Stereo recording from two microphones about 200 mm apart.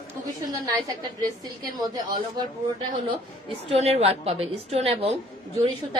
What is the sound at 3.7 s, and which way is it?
A woman's voice, 30° right (ahead or behind).